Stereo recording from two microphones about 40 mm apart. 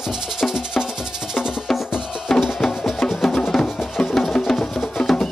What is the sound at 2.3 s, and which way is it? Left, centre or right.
Music, centre.